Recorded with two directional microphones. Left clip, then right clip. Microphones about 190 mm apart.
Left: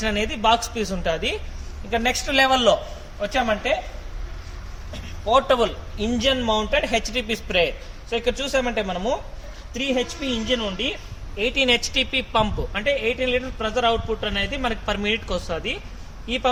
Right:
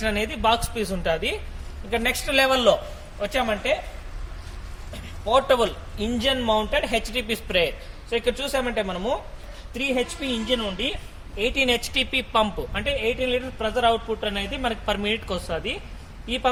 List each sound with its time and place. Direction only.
0.0 s a woman's voice: 15° right (ahead or behind)
5.2 s a woman's voice: 20° right (ahead or behind)